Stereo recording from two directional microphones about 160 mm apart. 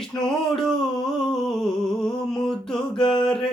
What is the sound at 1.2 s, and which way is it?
Humming, centre (ahead or behind).